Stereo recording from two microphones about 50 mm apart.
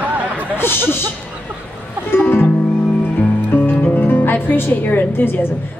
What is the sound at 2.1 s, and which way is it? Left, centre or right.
Music, left.